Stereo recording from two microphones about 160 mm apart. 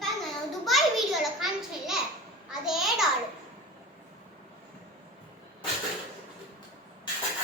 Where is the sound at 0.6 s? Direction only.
Centre (ahead or behind).